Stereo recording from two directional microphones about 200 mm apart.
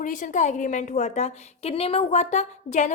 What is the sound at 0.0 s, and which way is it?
A woman's voice, 40° left (ahead or behind).